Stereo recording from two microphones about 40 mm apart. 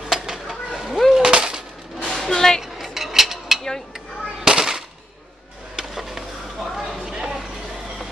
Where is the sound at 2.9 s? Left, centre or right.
Centre.